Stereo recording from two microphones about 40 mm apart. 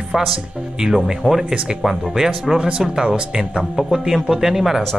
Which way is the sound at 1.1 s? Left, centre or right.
Centre.